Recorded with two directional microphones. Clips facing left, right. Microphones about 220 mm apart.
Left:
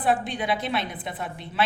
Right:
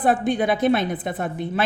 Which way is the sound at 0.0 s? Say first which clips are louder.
Right 6 dB; 45° right (ahead or behind).